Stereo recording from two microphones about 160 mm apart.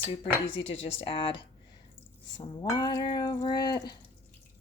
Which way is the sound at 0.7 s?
35° left (ahead or behind).